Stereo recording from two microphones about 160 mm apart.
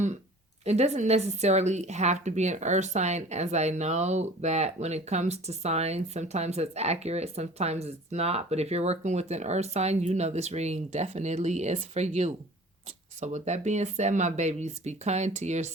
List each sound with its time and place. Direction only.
0.6 s speech: 45° right (ahead or behind)